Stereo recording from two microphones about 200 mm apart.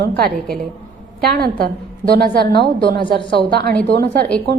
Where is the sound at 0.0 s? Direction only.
55° right (ahead or behind).